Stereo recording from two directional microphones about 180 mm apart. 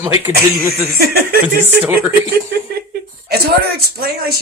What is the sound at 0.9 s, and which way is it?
Speech, 55° right (ahead or behind).